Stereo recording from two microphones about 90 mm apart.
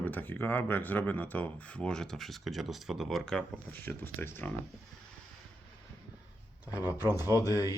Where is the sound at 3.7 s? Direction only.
20° left (ahead or behind).